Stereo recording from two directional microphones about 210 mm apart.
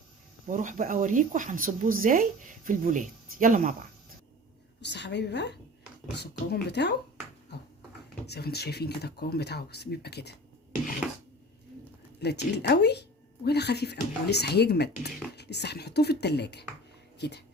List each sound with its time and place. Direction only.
0.4 s speech: 40° right (ahead or behind)
4.8 s a woman's voice: 55° left (ahead or behind)
8.3 s speech: 50° left (ahead or behind)
12.2 s speech: 50° left (ahead or behind)